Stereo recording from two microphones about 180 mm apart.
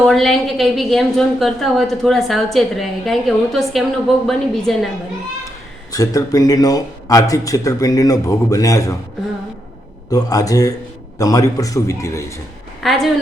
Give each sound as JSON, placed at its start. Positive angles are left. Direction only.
{"t": 0.0, "sound": "a woman's voice", "side_deg": 0}
{"t": 5.9, "sound": "a man's voice", "side_deg": 20}
{"t": 10.1, "sound": "a man's voice", "side_deg": 20}
{"t": 12.8, "sound": "a woman's voice", "side_deg": 0}